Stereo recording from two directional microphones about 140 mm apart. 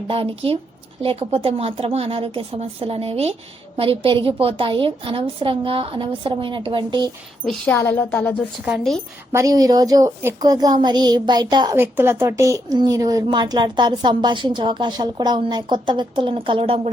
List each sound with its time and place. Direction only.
0.1 s speech: 40° right (ahead or behind)
7.4 s speech: 10° left (ahead or behind)
9.3 s a woman's voice: 25° right (ahead or behind)
11.8 s a woman's voice: 15° right (ahead or behind); by 16.9 s 40° right (ahead or behind)